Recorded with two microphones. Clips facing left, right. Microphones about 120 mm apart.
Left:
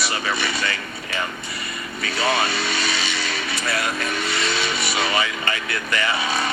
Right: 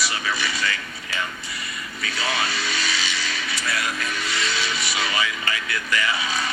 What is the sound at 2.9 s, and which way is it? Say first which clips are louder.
Vehicle: left 2 dB; 60° left (ahead or behind).